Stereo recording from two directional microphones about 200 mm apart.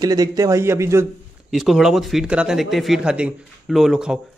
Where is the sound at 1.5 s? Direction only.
Centre (ahead or behind).